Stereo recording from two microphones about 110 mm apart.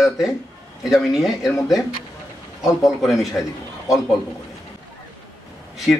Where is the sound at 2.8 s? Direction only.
Centre (ahead or behind).